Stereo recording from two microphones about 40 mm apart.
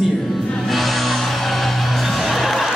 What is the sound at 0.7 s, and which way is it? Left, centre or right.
Music, centre.